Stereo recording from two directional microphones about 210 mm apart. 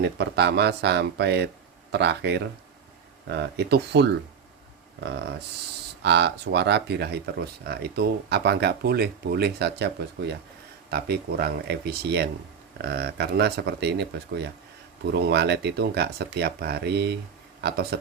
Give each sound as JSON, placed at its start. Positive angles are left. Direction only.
{"t": 0.0, "sound": "speech", "side_deg": -50}